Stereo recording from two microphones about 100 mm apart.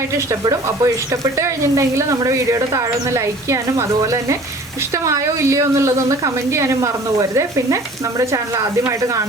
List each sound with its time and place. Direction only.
0.4 s a woman's voice: 35° right (ahead or behind)